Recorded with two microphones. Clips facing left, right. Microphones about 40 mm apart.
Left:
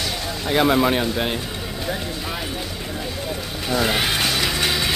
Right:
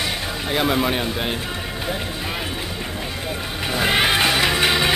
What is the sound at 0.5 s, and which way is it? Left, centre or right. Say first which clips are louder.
Speech: left 3 dB; centre.